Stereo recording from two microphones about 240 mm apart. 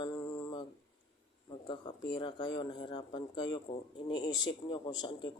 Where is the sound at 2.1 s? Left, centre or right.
Centre.